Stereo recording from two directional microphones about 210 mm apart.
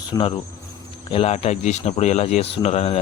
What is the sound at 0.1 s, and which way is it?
Speech, 25° left (ahead or behind).